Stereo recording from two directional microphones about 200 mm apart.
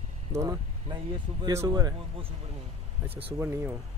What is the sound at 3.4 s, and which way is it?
Speech, 15° right (ahead or behind).